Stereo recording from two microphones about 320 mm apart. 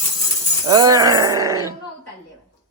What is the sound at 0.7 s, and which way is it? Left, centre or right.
Speech, centre.